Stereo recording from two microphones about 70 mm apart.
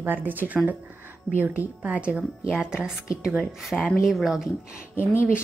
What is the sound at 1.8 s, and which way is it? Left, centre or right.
Speech, centre.